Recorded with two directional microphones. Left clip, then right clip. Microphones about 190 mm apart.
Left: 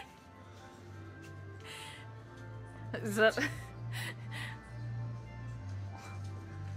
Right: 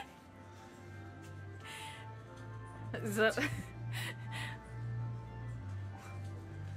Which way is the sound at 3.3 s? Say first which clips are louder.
Left 2 dB; centre (ahead or behind).